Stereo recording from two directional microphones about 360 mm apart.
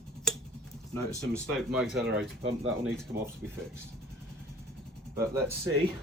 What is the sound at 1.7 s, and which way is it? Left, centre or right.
Speech, centre.